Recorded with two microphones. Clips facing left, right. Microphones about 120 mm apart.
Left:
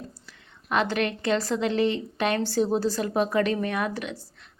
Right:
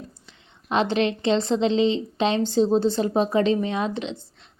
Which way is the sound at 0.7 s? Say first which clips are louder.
Right 3 dB; 25° right (ahead or behind).